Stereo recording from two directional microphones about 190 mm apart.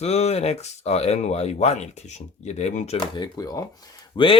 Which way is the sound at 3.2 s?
20° left (ahead or behind).